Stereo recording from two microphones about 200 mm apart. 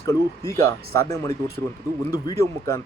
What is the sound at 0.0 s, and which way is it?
A man's voice, 15° left (ahead or behind).